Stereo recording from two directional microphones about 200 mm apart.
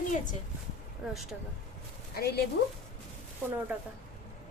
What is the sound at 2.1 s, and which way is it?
Speech, 50° left (ahead or behind).